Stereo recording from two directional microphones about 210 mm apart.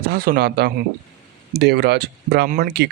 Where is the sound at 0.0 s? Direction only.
45° right (ahead or behind).